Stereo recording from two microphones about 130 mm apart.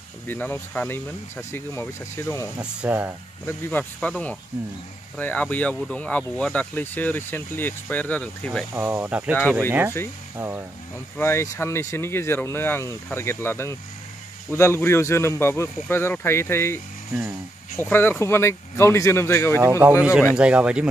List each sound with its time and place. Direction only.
0.3 s speech: 15° left (ahead or behind)
2.6 s speech: 10° right (ahead or behind)
3.4 s speech: 15° left (ahead or behind)
8.7 s speech: 15° right (ahead or behind)
11.1 s speech: 20° left (ahead or behind)
20.0 s speech: 10° right (ahead or behind)